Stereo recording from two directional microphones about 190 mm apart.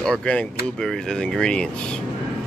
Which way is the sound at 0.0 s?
5° left (ahead or behind).